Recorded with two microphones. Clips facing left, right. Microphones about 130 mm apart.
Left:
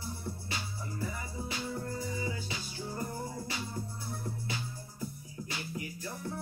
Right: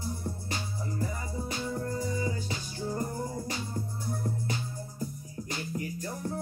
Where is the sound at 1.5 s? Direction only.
40° right (ahead or behind).